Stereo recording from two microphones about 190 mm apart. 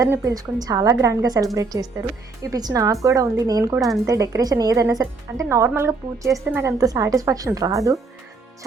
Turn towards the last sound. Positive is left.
turn(degrees=-15)  # may be behind; listen again after turning